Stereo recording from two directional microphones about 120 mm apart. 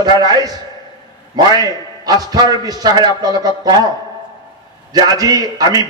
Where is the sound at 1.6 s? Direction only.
35° right (ahead or behind).